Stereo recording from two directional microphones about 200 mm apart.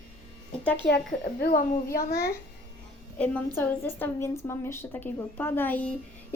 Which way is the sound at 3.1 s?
5° left (ahead or behind).